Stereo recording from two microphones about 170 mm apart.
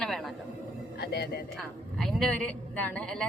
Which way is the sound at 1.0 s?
70° left (ahead or behind).